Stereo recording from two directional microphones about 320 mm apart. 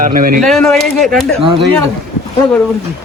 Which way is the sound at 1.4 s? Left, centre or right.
Centre.